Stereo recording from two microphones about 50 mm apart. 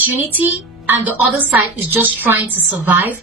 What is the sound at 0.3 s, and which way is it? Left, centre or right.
Speech, right.